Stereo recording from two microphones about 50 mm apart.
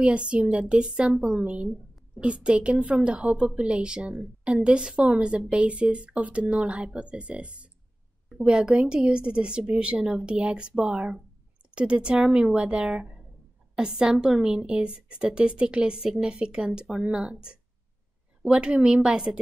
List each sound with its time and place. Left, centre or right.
0.0 s a woman's voice: right